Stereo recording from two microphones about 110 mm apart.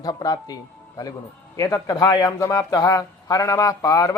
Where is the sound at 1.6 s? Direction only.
35° left (ahead or behind).